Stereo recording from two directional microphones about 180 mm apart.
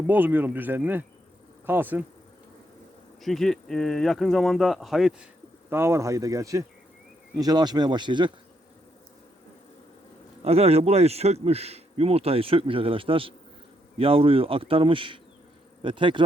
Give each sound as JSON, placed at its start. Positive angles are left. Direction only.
{"t": 0.1, "sound": "speech", "side_deg": -10}
{"t": 3.2, "sound": "a man's voice", "side_deg": 0}
{"t": 5.7, "sound": "speech", "side_deg": -15}
{"t": 10.4, "sound": "speech", "side_deg": -35}